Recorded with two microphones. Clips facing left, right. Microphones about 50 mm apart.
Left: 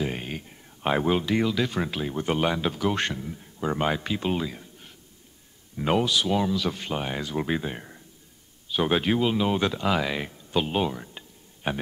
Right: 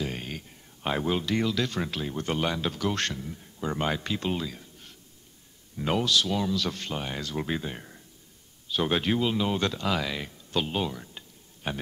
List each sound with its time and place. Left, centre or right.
0.0 s speech: centre